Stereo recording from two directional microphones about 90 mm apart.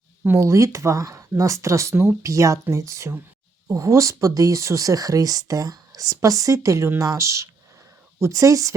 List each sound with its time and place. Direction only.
0.3 s speech: 35° right (ahead or behind)